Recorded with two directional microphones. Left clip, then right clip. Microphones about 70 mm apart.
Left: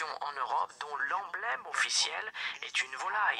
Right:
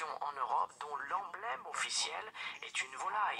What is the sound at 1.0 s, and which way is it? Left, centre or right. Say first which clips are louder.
Speech: left 7 dB; left.